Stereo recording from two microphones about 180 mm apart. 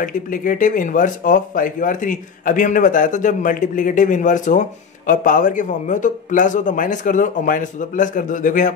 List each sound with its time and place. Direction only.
0.0 s speech: 45° left (ahead or behind)